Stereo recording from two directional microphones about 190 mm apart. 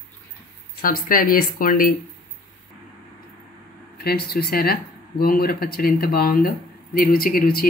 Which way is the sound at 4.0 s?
55° left (ahead or behind).